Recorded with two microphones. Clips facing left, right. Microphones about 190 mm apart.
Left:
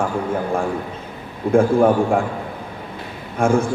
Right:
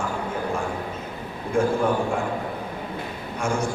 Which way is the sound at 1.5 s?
55° left (ahead or behind).